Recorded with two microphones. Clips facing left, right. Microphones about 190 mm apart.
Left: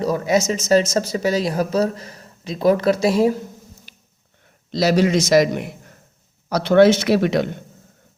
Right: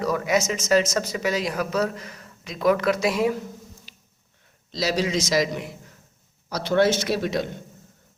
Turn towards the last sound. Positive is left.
turn(degrees=65)  # may be behind; listen again after turning